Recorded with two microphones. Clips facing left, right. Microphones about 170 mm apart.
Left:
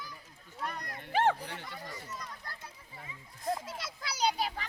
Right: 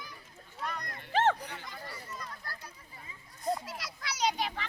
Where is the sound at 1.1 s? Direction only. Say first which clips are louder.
Right 1 dB; 15° left (ahead or behind).